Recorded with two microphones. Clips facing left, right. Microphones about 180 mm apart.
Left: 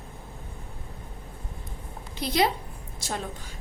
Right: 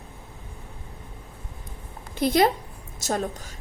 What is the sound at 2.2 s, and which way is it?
A woman's voice, 50° right (ahead or behind).